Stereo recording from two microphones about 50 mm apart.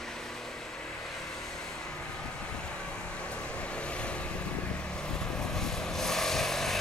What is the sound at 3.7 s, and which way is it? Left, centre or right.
Vehicle, left.